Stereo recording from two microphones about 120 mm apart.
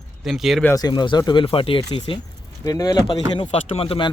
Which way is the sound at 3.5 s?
55° left (ahead or behind).